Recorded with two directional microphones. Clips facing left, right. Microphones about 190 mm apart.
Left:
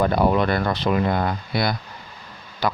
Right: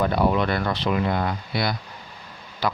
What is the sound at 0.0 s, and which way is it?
Speech, 45° left (ahead or behind).